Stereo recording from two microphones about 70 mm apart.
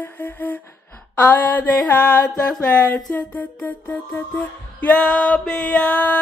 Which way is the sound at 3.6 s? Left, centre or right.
Left.